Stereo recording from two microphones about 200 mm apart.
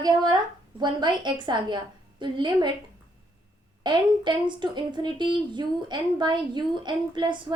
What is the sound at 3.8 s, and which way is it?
Speech, 20° right (ahead or behind).